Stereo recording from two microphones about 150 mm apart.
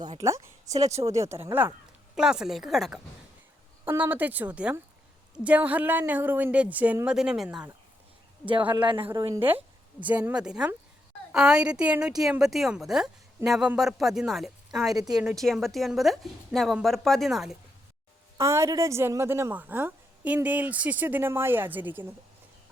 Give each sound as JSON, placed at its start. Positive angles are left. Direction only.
{"t": 0.2, "sound": "speech", "side_deg": -20}
{"t": 0.7, "sound": "speech", "side_deg": -45}
{"t": 1.0, "sound": "a woman's voice", "side_deg": -20}
{"t": 3.8, "sound": "a woman's voice", "side_deg": -15}
{"t": 8.4, "sound": "speech", "side_deg": -35}
{"t": 9.3, "sound": "a woman's voice", "side_deg": -15}
{"t": 14.9, "sound": "speech", "side_deg": -25}
{"t": 15.2, "sound": "a woman's voice", "side_deg": 0}
{"t": 18.3, "sound": "a woman's voice", "side_deg": -20}